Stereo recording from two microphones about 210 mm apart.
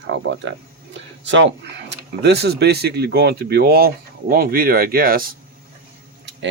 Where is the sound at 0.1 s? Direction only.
60° right (ahead or behind); by 5.3 s 45° right (ahead or behind).